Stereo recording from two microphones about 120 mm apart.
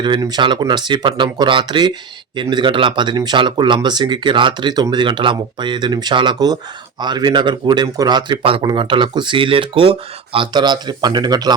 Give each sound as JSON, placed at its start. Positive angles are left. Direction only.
{"t": 0.0, "sound": "a man's voice", "side_deg": -40}